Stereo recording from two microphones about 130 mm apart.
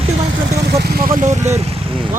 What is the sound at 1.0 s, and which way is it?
Speech, 85° right.